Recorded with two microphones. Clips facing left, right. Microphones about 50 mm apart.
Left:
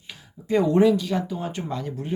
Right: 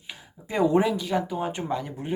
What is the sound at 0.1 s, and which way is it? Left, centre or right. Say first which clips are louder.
Speech: left 7 dB; centre.